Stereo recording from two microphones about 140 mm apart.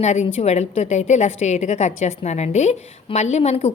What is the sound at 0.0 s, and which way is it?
A woman's voice, 55° left (ahead or behind).